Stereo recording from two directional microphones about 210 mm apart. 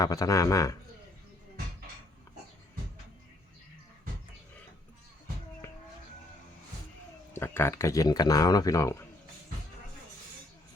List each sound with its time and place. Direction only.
0.0 s speech: 15° left (ahead or behind)
5.6 s a sound: 10° left (ahead or behind)
7.3 s speech: 10° left (ahead or behind)